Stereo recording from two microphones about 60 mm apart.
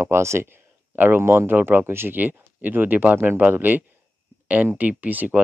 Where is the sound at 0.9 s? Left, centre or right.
Right.